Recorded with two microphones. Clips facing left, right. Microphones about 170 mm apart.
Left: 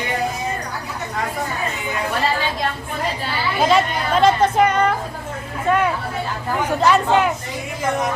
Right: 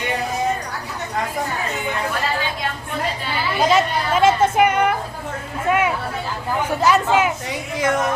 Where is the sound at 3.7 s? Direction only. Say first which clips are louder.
Even; 5° right (ahead or behind).